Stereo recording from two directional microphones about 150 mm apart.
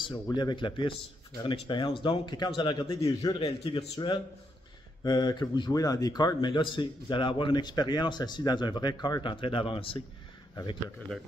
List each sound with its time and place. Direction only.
0.0 s speech: 30° left (ahead or behind)